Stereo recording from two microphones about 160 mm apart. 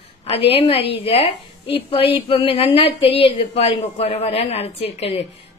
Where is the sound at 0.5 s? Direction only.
35° left (ahead or behind).